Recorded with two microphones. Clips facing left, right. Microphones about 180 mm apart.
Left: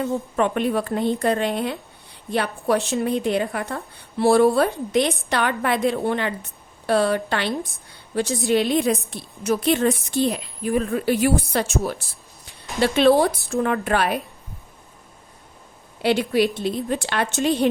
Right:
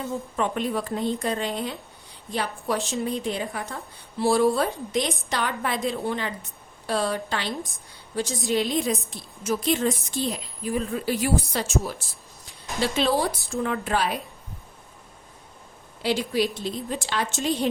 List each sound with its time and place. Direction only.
0.0 s a woman's voice: 60° left (ahead or behind)
16.0 s a woman's voice: 65° left (ahead or behind)